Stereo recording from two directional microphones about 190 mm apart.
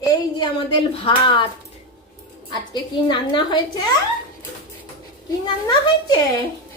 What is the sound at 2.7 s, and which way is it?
A woman's voice, 25° left (ahead or behind).